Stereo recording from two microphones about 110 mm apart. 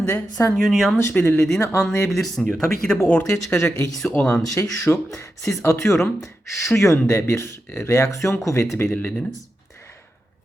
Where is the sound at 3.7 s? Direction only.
30° left (ahead or behind).